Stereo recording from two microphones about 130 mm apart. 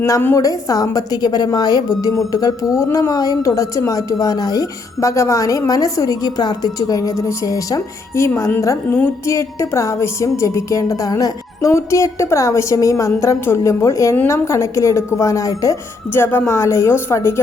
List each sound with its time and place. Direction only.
0.0 s a woman's voice: 15° left (ahead or behind)